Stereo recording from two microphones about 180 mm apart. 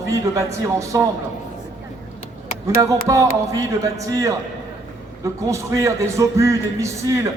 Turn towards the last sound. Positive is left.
turn(degrees=-15)  # may be behind; listen again after turning